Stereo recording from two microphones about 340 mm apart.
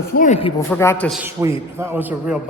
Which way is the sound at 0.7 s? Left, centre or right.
Centre.